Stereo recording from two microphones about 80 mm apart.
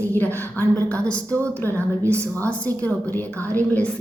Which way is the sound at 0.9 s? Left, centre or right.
Centre.